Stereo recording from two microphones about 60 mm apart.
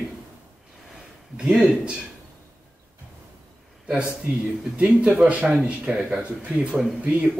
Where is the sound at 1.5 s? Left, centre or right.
Centre.